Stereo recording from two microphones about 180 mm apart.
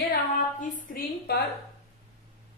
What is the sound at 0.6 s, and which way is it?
Speech, 50° left (ahead or behind).